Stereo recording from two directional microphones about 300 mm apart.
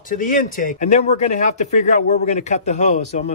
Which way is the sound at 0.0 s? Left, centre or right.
Left.